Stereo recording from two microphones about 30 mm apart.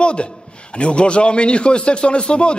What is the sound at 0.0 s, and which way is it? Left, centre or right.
A man's voice, left.